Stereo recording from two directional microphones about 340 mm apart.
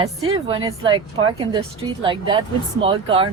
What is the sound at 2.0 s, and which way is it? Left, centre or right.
A woman's voice, centre.